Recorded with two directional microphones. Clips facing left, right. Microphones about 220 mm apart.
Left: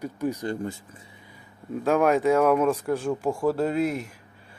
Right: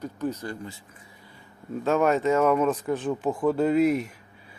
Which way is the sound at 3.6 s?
5° right (ahead or behind).